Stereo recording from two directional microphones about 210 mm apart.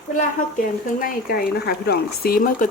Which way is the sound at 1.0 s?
45° left (ahead or behind).